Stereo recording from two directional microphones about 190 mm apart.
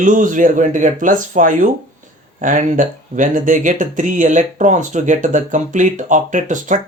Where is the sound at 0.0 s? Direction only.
45° right (ahead or behind).